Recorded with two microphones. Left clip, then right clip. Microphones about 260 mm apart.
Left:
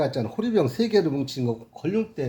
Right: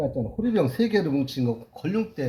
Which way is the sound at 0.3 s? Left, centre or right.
Centre.